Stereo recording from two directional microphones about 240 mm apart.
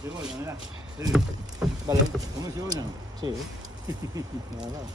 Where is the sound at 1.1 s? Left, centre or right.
Centre.